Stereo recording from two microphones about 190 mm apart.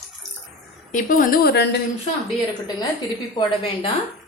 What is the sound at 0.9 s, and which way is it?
Speech, 45° left (ahead or behind).